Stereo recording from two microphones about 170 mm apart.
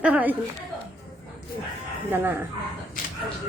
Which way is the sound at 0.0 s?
10° right (ahead or behind).